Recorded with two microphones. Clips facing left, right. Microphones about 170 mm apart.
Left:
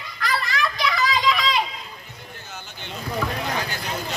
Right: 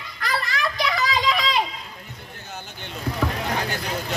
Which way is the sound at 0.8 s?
30° right (ahead or behind).